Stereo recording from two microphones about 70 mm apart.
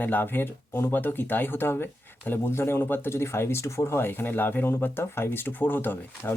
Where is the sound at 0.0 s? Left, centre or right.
Left.